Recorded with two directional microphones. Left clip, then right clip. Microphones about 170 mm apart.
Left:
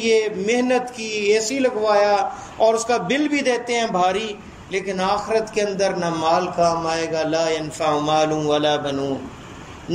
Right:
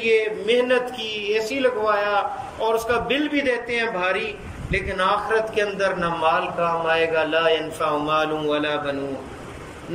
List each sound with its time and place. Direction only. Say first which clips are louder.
0.0 s speech: left 1 dB; 30° left (ahead or behind)